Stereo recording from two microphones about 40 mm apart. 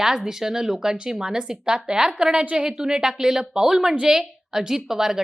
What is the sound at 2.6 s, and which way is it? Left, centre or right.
A woman's voice, centre.